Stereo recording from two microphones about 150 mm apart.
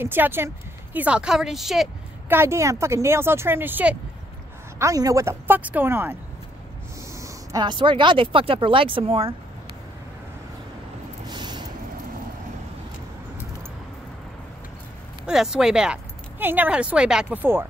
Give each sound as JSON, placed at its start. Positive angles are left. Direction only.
{"t": 0.0, "sound": "a woman's voice", "side_deg": -15}
{"t": 2.2, "sound": "speech", "side_deg": -15}
{"t": 7.2, "sound": "speech", "side_deg": -25}
{"t": 11.2, "sound": "a sound", "side_deg": -30}
{"t": 15.2, "sound": "speech", "side_deg": -5}